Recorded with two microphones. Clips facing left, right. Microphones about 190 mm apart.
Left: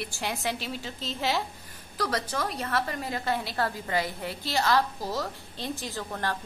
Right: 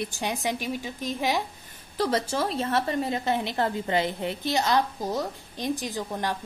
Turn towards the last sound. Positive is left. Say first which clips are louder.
# right 3 dB
turn(degrees=-15)  # may be behind; listen again after turning